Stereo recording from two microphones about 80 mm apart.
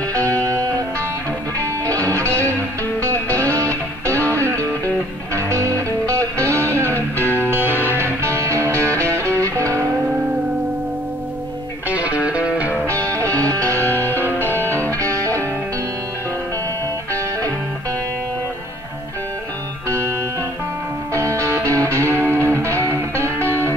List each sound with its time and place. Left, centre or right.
2.0 s music: right
3.3 s music: left
4.8 s music: right
7.2 s music: left
7.4 s music: right
11.9 s music: centre
14.0 s music: right
14.6 s music: left
21.2 s music: right
21.6 s music: left
22.5 s music: right
23.4 s music: left